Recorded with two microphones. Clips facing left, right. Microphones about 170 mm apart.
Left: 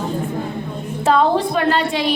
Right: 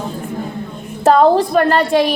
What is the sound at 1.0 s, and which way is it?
A woman's voice, 45° right (ahead or behind).